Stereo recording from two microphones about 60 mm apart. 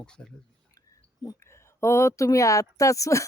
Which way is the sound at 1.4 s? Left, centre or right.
Left.